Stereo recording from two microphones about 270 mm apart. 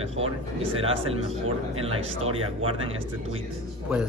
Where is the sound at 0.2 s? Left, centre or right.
Right.